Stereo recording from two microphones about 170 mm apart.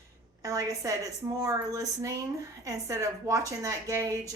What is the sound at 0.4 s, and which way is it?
A woman's voice, 20° right (ahead or behind).